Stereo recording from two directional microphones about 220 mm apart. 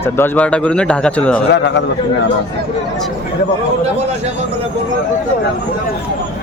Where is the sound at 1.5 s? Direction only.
55° left (ahead or behind).